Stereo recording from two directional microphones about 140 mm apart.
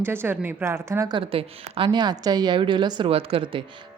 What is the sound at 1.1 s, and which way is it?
A woman's voice, 35° right (ahead or behind).